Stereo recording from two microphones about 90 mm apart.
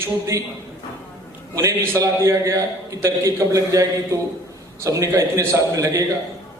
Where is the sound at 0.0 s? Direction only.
35° right (ahead or behind).